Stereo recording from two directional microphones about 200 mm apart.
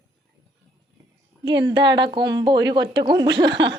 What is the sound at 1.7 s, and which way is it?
Speech, 60° right (ahead or behind).